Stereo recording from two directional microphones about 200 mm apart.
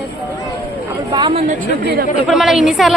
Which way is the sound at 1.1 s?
25° right (ahead or behind).